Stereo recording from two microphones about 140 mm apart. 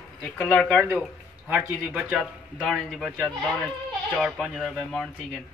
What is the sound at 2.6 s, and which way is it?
Speech, centre (ahead or behind).